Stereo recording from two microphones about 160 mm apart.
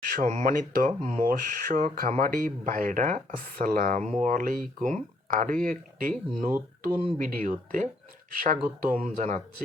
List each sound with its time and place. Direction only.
0.1 s speech: 50° right (ahead or behind)